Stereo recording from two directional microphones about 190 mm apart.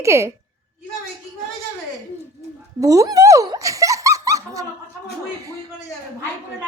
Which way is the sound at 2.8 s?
15° right (ahead or behind).